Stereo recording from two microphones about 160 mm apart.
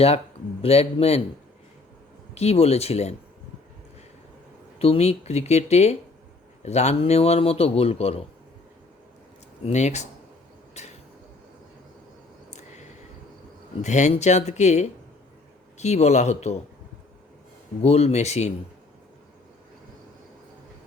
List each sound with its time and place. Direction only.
0.6 s speech: 40° left (ahead or behind)
2.3 s speech: 40° left (ahead or behind)
4.8 s speech: 40° left (ahead or behind)
9.6 s speech: 45° left (ahead or behind)
10.8 s a sound: 45° left (ahead or behind)
12.5 s a sound: 45° left (ahead or behind)
13.8 s speech: 45° left (ahead or behind)
17.8 s speech: 40° left (ahead or behind)